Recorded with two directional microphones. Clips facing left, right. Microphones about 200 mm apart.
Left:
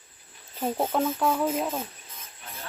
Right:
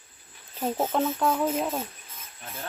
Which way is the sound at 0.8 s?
Centre (ahead or behind).